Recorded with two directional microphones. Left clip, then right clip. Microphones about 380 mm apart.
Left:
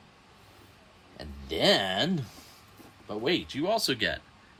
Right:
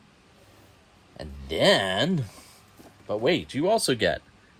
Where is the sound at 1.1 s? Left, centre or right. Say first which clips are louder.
Right 4 dB; centre.